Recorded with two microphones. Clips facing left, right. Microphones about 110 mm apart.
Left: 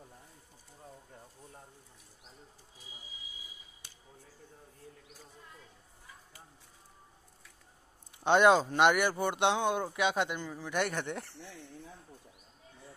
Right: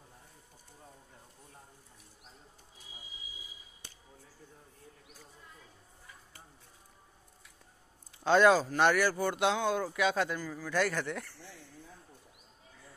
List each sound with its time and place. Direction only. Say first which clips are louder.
8.2 s speech: even; 25° left (ahead or behind)